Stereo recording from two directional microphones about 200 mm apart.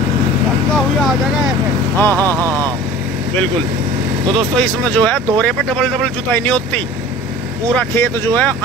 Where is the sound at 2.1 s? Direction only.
15° right (ahead or behind).